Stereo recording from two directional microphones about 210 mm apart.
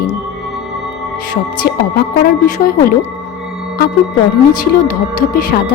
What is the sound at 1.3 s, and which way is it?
Speech, 45° left (ahead or behind).